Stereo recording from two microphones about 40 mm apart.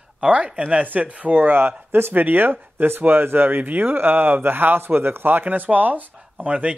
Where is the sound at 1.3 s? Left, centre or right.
Right.